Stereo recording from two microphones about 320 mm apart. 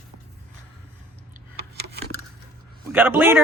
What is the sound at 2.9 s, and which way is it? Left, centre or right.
Speech, centre.